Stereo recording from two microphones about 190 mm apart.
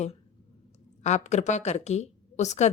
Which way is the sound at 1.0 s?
35° left (ahead or behind).